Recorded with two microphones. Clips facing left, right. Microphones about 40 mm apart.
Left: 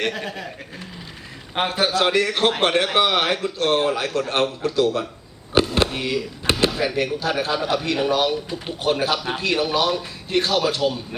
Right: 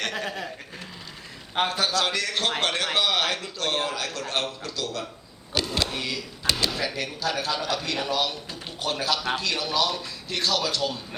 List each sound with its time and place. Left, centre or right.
0.3 s speech: centre
1.5 s a man's voice: left
6.5 s a sound: left
6.8 s a man's voice: left